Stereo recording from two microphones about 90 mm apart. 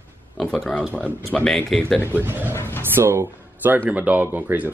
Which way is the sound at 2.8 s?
25° right (ahead or behind).